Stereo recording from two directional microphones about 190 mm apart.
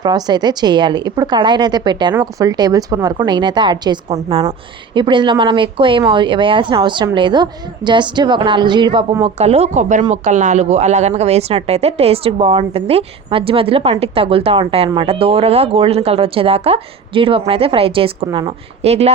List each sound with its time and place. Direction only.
0.0 s a woman's voice: 20° right (ahead or behind)